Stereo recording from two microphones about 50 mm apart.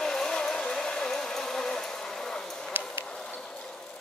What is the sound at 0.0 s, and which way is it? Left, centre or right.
Vehicle, centre.